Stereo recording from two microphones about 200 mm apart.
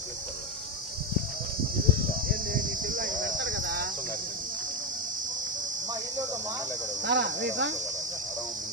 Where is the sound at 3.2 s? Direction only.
70° right (ahead or behind); by 3.9 s 55° right (ahead or behind).